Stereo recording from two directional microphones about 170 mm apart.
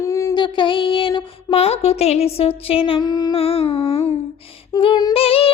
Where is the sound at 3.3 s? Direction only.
35° left (ahead or behind).